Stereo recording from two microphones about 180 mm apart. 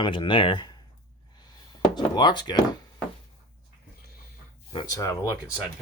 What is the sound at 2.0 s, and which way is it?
Speech, 25° left (ahead or behind).